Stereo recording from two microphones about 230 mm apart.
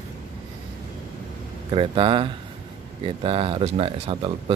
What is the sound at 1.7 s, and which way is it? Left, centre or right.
Speech, right.